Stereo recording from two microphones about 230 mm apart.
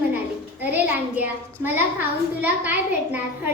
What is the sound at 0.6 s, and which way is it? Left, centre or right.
A child's voice, centre.